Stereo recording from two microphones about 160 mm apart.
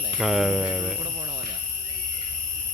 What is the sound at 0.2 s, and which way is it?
Speech, centre (ahead or behind).